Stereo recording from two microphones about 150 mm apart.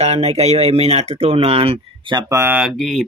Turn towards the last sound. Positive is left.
turn(degrees=0)  # may be behind; listen again after turning